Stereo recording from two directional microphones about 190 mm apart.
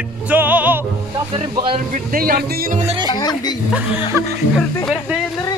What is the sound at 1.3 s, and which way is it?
Speech, 30° right (ahead or behind).